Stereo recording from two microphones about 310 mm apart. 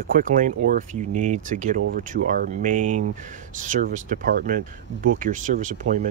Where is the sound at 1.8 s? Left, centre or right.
Right.